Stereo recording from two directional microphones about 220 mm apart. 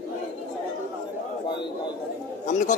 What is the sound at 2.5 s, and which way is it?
Speech, 35° left (ahead or behind).